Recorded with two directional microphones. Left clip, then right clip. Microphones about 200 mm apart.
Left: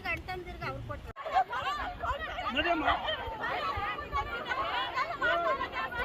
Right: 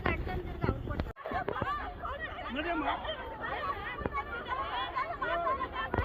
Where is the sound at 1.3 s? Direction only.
15° left (ahead or behind).